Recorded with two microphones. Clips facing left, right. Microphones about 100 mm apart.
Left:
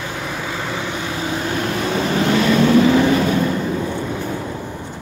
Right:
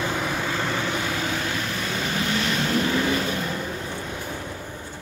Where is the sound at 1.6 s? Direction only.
40° left (ahead or behind).